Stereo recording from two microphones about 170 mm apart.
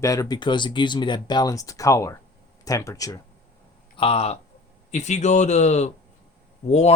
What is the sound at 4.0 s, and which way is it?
Speech, 35° left (ahead or behind).